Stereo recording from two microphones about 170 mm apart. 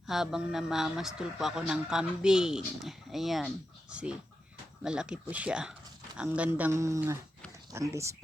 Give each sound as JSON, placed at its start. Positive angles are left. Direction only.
{"t": 0.1, "sound": "speech", "side_deg": 0}